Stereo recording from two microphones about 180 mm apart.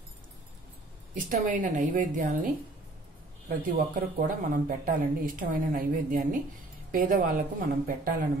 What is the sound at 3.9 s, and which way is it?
A woman's voice, 50° right (ahead or behind).